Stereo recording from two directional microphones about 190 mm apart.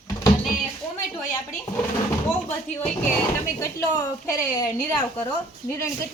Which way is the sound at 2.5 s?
10° left (ahead or behind).